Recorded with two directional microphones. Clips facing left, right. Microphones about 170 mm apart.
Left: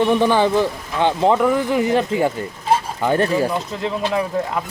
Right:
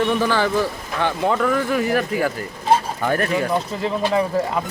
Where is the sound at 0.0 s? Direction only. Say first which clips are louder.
Left 4 dB; 20° left (ahead or behind).